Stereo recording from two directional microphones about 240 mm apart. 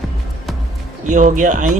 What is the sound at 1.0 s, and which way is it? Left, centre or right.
Speech, right.